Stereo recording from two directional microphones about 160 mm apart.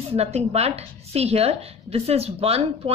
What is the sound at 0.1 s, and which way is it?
A woman's voice, 40° right (ahead or behind).